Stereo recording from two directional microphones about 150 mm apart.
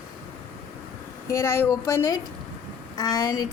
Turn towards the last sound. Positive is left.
turn(degrees=25)  # may be behind; listen again after turning